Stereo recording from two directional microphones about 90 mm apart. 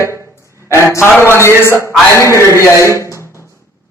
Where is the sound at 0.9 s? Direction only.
30° left (ahead or behind).